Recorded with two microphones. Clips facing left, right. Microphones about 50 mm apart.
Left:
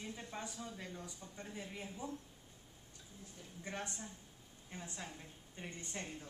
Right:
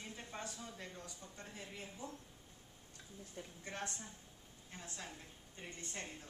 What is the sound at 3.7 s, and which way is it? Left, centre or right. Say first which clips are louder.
A woman's voice: left 2 dB; centre.